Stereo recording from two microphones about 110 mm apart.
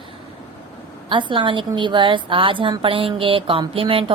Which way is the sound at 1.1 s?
45° right (ahead or behind).